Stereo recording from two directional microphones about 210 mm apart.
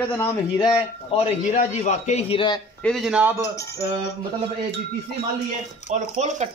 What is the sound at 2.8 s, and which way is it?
Speech, centre (ahead or behind).